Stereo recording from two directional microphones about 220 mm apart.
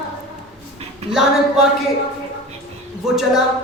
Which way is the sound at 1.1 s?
Centre (ahead or behind).